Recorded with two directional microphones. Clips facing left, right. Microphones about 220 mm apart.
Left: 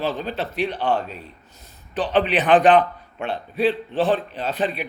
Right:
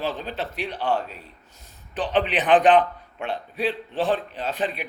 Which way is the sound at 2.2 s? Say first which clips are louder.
Left 2 dB; 15° right (ahead or behind).